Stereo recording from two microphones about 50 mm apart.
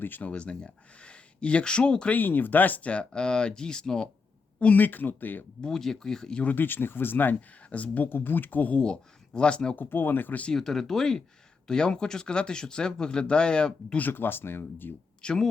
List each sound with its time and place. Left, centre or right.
0.2 s speech: left
2.1 s speech: left
2.9 s speech: centre
4.6 s speech: left
5.6 s speech: centre
6.4 s speech: left
7.7 s speech: left
8.8 s speech: centre
9.7 s speech: left
10.5 s speech: centre
14.0 s speech: left
15.2 s speech: centre